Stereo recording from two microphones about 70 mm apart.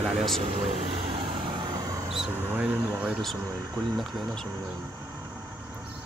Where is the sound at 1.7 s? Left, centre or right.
Right.